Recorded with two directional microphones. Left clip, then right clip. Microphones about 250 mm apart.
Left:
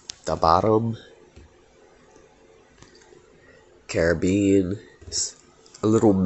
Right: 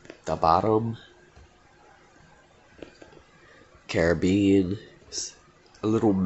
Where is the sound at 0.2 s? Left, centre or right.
Centre.